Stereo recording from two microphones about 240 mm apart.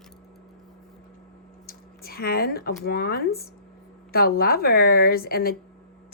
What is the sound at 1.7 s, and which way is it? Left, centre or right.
A woman's voice, left.